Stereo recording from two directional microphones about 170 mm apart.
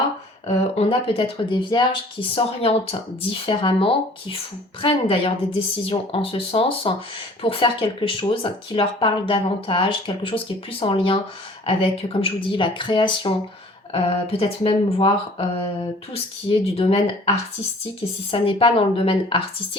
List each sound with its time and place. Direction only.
0.4 s speech: 35° left (ahead or behind)